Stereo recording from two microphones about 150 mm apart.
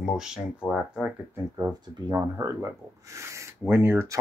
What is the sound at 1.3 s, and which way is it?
Speech, 15° right (ahead or behind).